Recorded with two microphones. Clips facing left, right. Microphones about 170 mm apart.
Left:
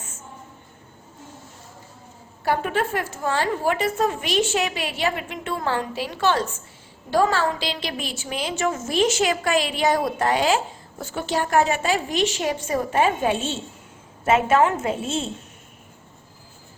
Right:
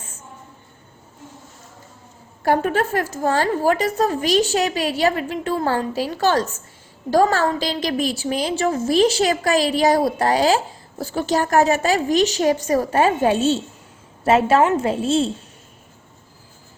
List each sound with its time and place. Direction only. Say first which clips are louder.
2.4 s a woman's voice: right 4 dB; 40° right (ahead or behind)